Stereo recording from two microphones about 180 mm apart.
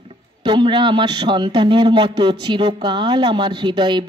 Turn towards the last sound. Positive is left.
turn(degrees=-25)  # may be behind; listen again after turning